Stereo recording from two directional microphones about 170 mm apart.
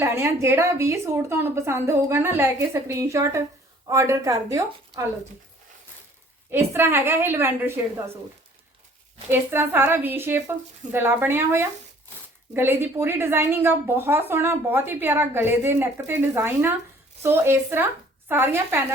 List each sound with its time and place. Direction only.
0.0 s a woman's voice: 15° right (ahead or behind)
6.5 s a woman's voice: 15° right (ahead or behind)
9.3 s a woman's voice: 15° right (ahead or behind)